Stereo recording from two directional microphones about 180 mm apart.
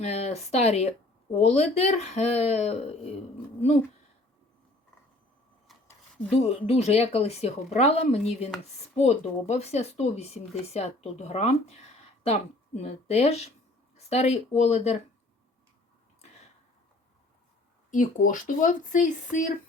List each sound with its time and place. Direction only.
0.0 s speech: 35° left (ahead or behind)
6.3 s speech: 35° left (ahead or behind)
17.9 s speech: 45° left (ahead or behind)